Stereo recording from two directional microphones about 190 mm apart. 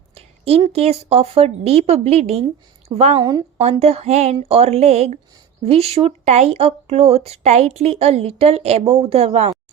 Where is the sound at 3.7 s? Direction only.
35° right (ahead or behind).